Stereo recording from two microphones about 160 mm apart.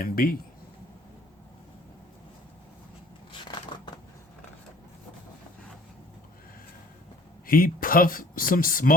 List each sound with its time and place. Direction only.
0.0 s speech: 65° left (ahead or behind)
7.4 s speech: 65° left (ahead or behind)